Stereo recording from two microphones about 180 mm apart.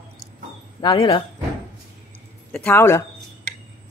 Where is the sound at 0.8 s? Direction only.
30° left (ahead or behind).